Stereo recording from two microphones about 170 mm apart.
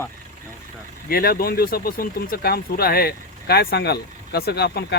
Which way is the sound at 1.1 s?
65° left (ahead or behind).